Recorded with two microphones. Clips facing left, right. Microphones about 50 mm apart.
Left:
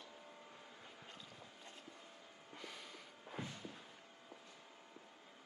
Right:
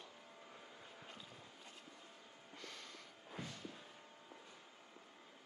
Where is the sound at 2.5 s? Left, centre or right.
Centre.